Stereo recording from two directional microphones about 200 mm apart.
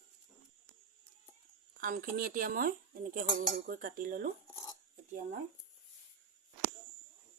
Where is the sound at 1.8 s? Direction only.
45° right (ahead or behind).